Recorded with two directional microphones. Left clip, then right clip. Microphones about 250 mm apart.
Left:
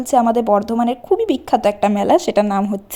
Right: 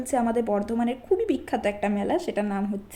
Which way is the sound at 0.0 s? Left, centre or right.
Left.